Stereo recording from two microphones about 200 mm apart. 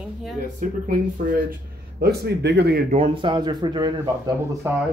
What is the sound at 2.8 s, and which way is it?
Speech, 30° right (ahead or behind).